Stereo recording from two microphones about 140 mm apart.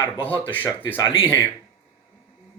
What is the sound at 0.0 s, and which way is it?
Speech, 10° left (ahead or behind).